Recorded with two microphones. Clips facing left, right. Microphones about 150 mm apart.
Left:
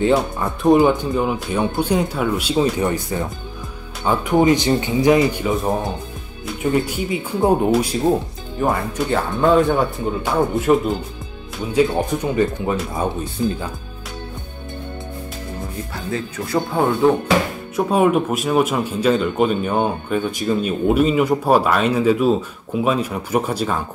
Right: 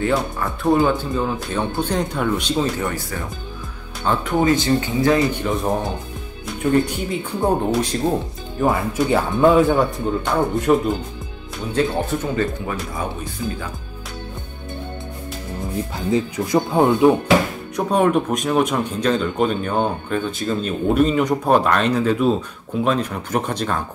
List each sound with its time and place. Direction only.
0.0 s speech: 20° left (ahead or behind)
2.8 s speech: 20° left (ahead or behind)
6.4 s speech: 5° left (ahead or behind)
8.5 s speech: 5° right (ahead or behind); by 13.3 s 25° left (ahead or behind)
15.9 s speech: 15° right (ahead or behind)
17.7 s speech: 5° left (ahead or behind)